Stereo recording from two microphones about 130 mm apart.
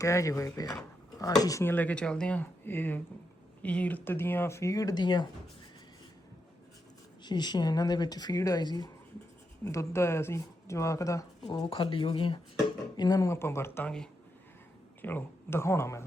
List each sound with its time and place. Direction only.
0.0 s speech: 25° left (ahead or behind)
1.7 s speech: 10° left (ahead or behind); by 5.3 s 35° left (ahead or behind)
7.3 s speech: 35° left (ahead or behind)
11.7 s speech: 40° left (ahead or behind)
13.0 s speech: 30° left (ahead or behind)
15.0 s speech: 15° left (ahead or behind)